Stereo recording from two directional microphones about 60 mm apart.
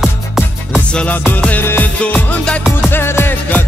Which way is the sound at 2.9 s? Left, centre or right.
Left.